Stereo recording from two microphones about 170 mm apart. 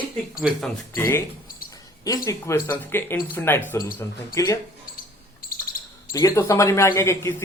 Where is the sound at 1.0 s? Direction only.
15° left (ahead or behind).